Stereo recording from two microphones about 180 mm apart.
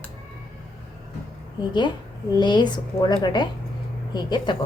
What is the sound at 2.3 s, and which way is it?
Speech, 25° left (ahead or behind).